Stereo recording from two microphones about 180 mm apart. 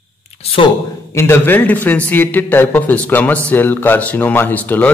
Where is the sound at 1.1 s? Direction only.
15° left (ahead or behind).